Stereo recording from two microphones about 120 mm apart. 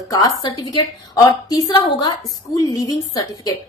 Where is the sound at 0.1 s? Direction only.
35° left (ahead or behind).